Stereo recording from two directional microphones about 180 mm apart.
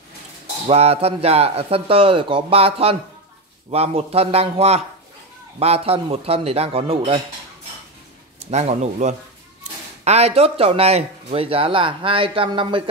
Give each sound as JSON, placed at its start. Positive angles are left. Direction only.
{"t": 0.7, "sound": "speech", "side_deg": -35}
{"t": 8.5, "sound": "speech", "side_deg": -40}